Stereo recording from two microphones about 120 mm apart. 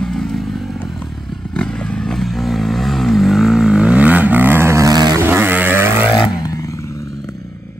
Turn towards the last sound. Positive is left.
turn(degrees=30)  # may be behind; listen again after turning